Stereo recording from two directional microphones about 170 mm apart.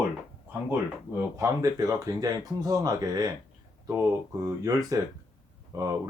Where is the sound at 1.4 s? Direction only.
20° right (ahead or behind).